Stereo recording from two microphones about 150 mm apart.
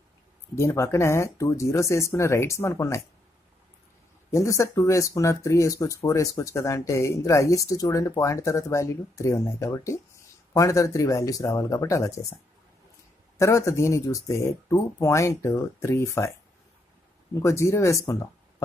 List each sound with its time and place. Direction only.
0.6 s speech: 20° left (ahead or behind)
4.3 s speech: 20° left (ahead or behind)
13.4 s speech: 20° left (ahead or behind)
17.3 s speech: 20° left (ahead or behind)